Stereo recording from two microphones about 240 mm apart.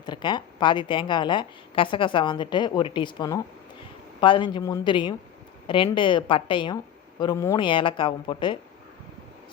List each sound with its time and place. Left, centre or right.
0.0 s a woman's voice: centre